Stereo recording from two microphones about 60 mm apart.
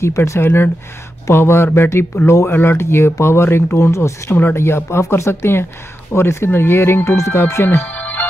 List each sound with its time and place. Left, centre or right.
0.0 s speech: left
3.7 s speech: left
4.4 s speech: left
7.8 s music: left